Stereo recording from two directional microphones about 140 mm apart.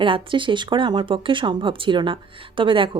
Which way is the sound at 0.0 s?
35° right (ahead or behind).